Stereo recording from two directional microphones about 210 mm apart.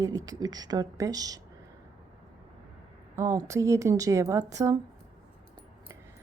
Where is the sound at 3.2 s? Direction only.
15° right (ahead or behind).